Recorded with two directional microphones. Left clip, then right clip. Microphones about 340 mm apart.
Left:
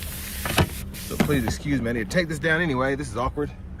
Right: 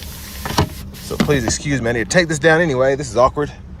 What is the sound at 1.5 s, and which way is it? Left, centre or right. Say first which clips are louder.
Speech: right 7 dB; centre.